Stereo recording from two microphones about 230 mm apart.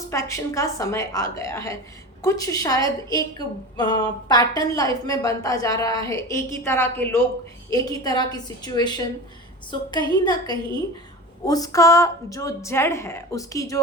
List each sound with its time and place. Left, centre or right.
0.1 s a woman's voice: centre
10.2 s a woman's voice: centre